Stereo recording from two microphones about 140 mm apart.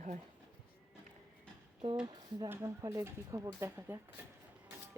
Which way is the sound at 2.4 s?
20° right (ahead or behind).